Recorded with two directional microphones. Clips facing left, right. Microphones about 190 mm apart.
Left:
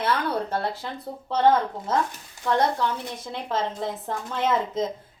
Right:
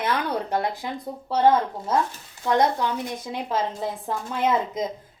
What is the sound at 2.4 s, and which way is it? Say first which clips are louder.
A woman's voice: right 2 dB; 15° right (ahead or behind).